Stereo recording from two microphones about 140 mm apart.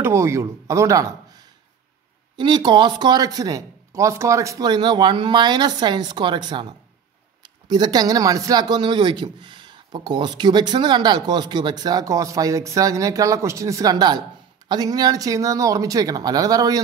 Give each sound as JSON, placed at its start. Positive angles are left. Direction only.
{"t": 0.0, "sound": "speech", "side_deg": -20}
{"t": 2.3, "sound": "speech", "side_deg": -35}